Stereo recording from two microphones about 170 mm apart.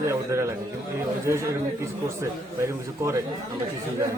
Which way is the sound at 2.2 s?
15° right (ahead or behind).